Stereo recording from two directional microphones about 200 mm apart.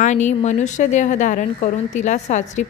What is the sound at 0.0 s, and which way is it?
A woman's voice, 35° left (ahead or behind).